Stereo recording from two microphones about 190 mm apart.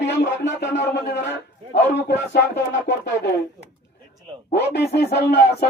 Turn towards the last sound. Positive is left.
turn(degrees=60)  # may be behind; listen again after turning